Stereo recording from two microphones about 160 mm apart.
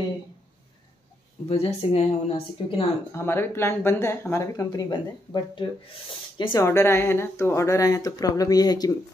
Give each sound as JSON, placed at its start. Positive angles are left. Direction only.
{"t": 1.5, "sound": "a woman's voice", "side_deg": 40}
{"t": 3.1, "sound": "speech", "side_deg": 15}
{"t": 6.6, "sound": "speech", "side_deg": 15}